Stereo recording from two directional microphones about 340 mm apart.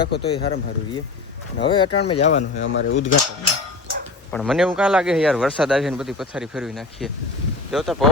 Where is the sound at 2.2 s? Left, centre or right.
Left.